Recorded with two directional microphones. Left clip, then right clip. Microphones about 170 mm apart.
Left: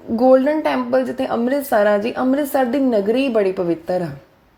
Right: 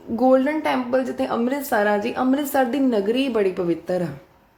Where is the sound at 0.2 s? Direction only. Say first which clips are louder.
Left 4 dB; 20° left (ahead or behind).